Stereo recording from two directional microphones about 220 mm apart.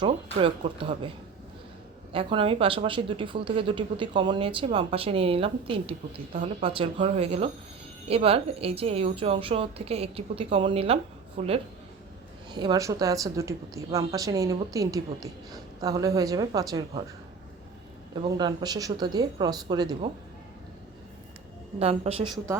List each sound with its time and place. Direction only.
0.0 s speech: 25° right (ahead or behind)
2.1 s a woman's voice: 25° right (ahead or behind)
18.1 s a woman's voice: 20° right (ahead or behind)
21.8 s speech: 25° right (ahead or behind)